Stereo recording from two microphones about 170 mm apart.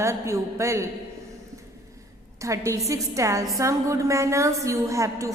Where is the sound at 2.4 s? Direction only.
20° right (ahead or behind).